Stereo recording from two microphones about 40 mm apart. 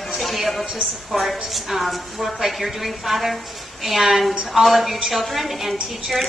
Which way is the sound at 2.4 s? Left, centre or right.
Centre.